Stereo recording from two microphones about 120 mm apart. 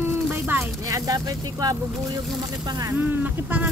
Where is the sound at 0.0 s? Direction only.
20° right (ahead or behind).